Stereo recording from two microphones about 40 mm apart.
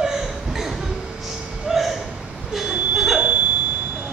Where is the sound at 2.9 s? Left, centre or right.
Centre.